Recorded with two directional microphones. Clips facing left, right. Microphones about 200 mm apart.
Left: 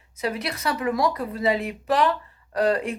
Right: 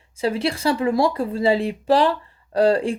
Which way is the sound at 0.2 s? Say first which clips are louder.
Right 6 dB; 30° right (ahead or behind).